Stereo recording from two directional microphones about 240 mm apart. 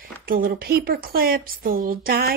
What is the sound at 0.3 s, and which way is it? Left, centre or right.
A woman's voice, right.